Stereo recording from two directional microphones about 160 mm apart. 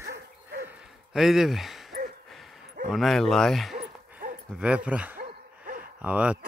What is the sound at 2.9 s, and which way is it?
Speech, centre (ahead or behind).